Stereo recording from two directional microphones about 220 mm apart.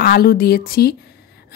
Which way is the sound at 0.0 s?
45° left (ahead or behind).